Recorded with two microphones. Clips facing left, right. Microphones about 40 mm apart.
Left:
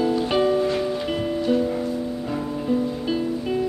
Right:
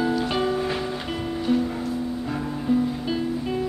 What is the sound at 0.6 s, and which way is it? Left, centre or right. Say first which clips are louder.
Music: left 4 dB; centre.